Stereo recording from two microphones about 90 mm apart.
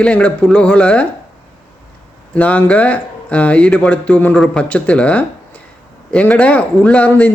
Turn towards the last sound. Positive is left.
turn(degrees=15)  # may be behind; listen again after turning